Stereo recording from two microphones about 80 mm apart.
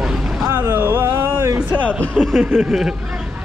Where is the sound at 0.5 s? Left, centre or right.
Right.